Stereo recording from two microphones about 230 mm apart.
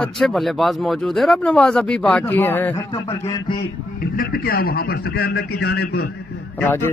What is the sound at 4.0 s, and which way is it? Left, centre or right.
A man's voice, left.